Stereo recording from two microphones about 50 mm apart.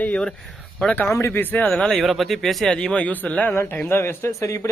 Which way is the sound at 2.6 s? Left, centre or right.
Centre.